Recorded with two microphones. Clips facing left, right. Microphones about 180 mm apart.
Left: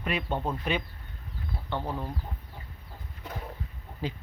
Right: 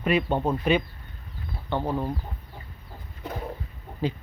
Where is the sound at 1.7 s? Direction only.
45° right (ahead or behind).